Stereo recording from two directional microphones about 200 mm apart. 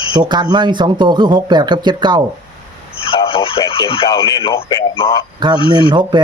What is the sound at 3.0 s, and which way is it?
Speech, 25° left (ahead or behind).